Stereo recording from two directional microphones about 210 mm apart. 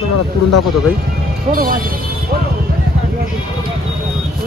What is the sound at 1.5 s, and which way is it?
Speech, 40° right (ahead or behind).